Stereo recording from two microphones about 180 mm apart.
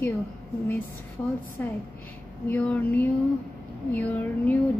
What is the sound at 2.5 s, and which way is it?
A woman's voice, 10° left (ahead or behind).